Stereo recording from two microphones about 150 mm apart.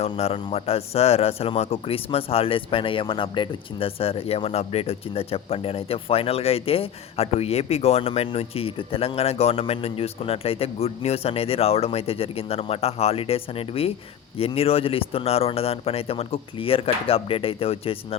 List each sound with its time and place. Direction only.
0.0 s speech: 45° left (ahead or behind)